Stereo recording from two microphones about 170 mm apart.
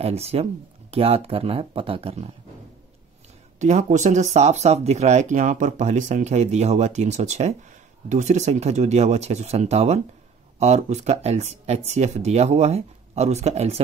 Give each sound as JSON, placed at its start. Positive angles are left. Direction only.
{"t": 0.0, "sound": "speech", "side_deg": -35}
{"t": 3.5, "sound": "speech", "side_deg": -45}